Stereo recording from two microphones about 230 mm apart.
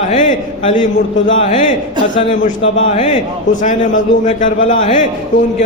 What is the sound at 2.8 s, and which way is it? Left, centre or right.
A man's voice, left.